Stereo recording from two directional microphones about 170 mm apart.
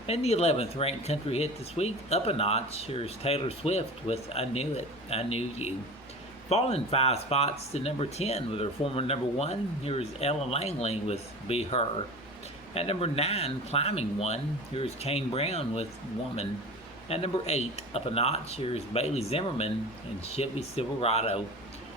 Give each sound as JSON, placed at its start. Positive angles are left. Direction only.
{"t": 0.1, "sound": "speech", "side_deg": 35}
{"t": 17.1, "sound": "speech", "side_deg": 35}